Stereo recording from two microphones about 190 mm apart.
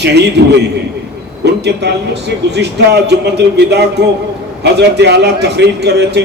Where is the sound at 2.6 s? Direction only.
60° right (ahead or behind).